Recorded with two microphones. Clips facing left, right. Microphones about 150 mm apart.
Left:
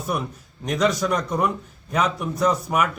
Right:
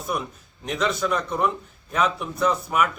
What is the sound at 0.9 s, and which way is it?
A man's voice, 15° left (ahead or behind).